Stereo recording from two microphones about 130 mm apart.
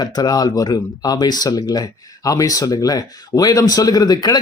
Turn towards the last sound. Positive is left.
turn(degrees=30)  # may be behind; listen again after turning